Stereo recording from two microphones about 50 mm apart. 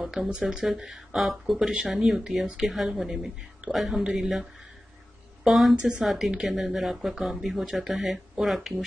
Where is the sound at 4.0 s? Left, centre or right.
Centre.